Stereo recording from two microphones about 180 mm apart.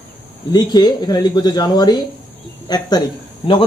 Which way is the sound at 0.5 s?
20° left (ahead or behind).